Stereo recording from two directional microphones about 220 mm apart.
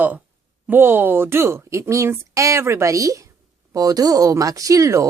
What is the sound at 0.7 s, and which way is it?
A woman's voice, 10° right (ahead or behind).